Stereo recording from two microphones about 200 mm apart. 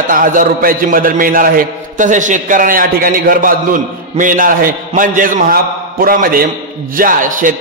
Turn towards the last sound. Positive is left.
turn(degrees=-40)  # may be behind; listen again after turning